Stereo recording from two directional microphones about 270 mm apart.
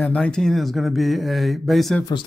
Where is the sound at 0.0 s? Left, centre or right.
Centre.